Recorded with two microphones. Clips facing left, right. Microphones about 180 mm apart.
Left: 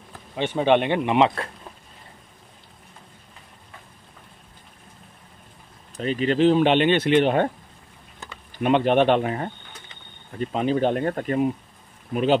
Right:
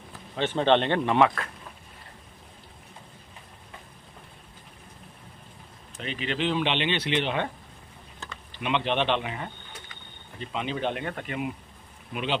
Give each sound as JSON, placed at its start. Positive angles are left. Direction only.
{"t": 0.4, "sound": "speech", "side_deg": 10}
{"t": 5.9, "sound": "speech", "side_deg": 40}